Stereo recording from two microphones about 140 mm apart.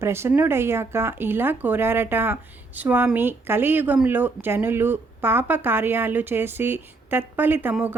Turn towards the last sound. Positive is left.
turn(degrees=-10)  # may be behind; listen again after turning